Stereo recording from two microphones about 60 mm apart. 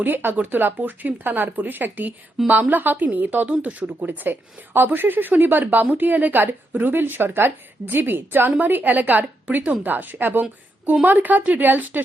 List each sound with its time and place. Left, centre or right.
0.0 s a woman's voice: right
4.2 s a woman's voice: right